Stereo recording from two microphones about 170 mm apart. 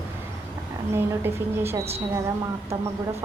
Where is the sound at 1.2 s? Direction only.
15° right (ahead or behind).